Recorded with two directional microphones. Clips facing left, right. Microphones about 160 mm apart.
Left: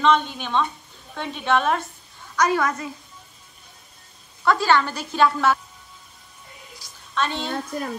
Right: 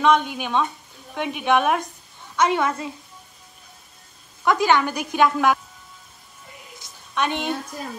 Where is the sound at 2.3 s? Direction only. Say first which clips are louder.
Right 1 dB; 25° right (ahead or behind).